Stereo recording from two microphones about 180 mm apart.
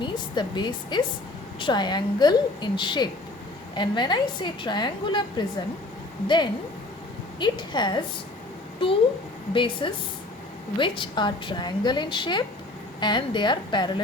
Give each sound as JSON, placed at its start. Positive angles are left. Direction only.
{"t": 0.0, "sound": "a woman's voice", "side_deg": 25}
{"t": 9.5, "sound": "a woman's voice", "side_deg": 25}